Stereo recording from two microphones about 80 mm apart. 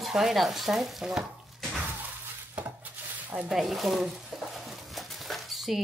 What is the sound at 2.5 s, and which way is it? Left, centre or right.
Dishes, right.